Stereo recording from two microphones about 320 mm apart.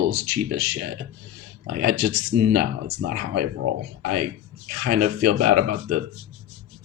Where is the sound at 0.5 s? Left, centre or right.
Right.